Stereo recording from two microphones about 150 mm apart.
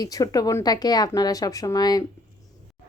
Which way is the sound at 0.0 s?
25° left (ahead or behind).